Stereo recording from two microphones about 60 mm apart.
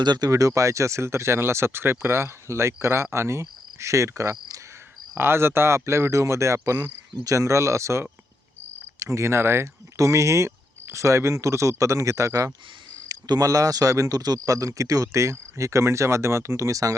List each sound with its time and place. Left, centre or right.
0.2 s speech: right
5.1 s speech: right
10.0 s speech: right
13.1 s speech: right